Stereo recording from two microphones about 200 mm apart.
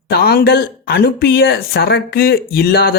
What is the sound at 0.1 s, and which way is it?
Speech, 50° left (ahead or behind).